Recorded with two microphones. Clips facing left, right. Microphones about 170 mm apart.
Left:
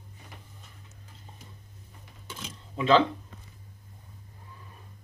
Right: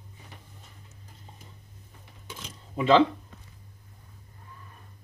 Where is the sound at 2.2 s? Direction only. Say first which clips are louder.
Left 1 dB; 10° right (ahead or behind).